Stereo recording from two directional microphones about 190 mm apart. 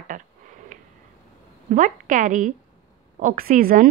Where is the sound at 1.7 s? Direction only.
45° right (ahead or behind).